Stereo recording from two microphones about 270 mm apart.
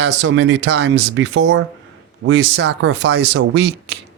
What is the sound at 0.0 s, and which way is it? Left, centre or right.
Speech, right.